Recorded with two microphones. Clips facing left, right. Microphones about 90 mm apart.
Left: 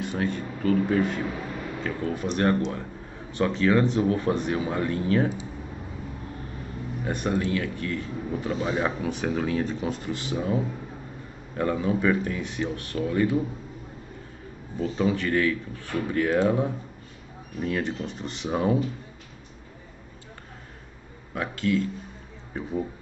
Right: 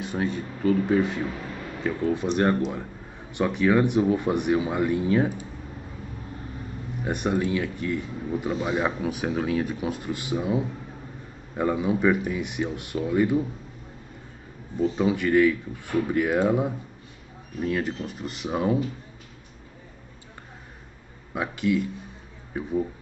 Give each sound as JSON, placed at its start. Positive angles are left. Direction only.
{"t": 0.2, "sound": "speech", "side_deg": -15}
{"t": 7.1, "sound": "speech", "side_deg": -15}
{"t": 14.8, "sound": "speech", "side_deg": -10}
{"t": 21.4, "sound": "speech", "side_deg": -15}
{"t": 22.5, "sound": "speech", "side_deg": 0}